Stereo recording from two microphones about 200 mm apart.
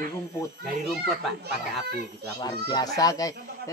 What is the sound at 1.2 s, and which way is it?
Speech, centre (ahead or behind).